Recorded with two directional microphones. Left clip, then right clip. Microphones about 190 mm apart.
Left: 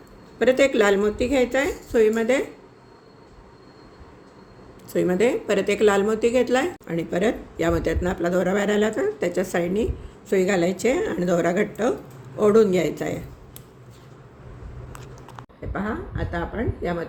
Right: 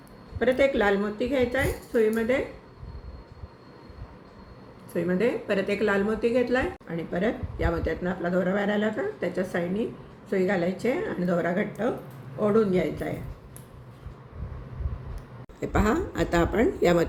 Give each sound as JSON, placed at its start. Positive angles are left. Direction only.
{"t": 0.3, "sound": "a woman's voice", "side_deg": 55}
{"t": 4.9, "sound": "a woman's voice", "side_deg": 50}
{"t": 15.7, "sound": "speech", "side_deg": -50}